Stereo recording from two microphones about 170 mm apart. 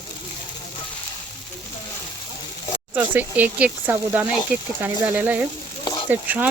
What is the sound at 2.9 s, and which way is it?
Speech, 10° right (ahead or behind).